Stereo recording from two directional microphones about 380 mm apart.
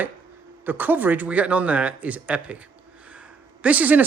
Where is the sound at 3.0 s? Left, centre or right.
Centre.